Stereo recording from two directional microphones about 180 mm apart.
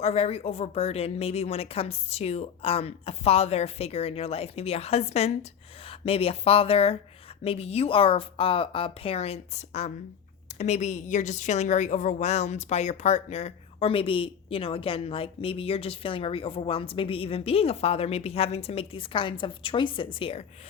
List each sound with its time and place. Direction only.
0.0 s a woman's voice: 35° left (ahead or behind)